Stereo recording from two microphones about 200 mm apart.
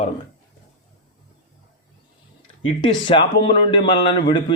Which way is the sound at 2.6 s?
25° left (ahead or behind).